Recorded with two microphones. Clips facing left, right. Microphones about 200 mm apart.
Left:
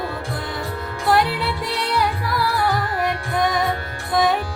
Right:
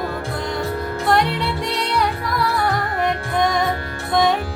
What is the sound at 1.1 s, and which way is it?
Music, 5° left (ahead or behind).